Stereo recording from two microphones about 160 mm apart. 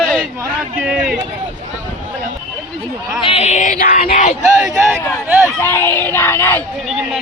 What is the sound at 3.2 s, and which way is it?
Music, 40° left (ahead or behind).